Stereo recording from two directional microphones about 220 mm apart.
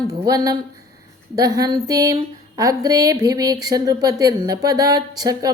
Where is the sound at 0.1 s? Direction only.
15° right (ahead or behind).